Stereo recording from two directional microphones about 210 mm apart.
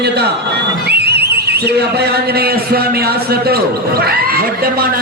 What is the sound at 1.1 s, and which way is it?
A man's voice, 50° right (ahead or behind).